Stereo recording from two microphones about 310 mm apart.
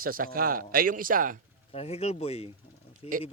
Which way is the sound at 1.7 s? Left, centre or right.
Centre.